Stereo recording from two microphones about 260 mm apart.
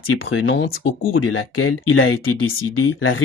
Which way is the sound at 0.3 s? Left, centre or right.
Left.